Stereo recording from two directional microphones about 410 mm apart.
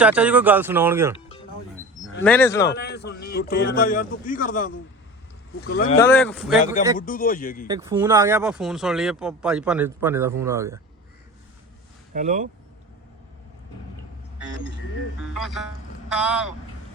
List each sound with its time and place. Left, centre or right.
0.0 s speech: centre
2.2 s speech: centre
2.6 s a man's voice: left
6.0 s speech: centre
6.6 s a man's voice: centre
7.7 s speech: centre
12.1 s speech: centre
15.2 s speech: centre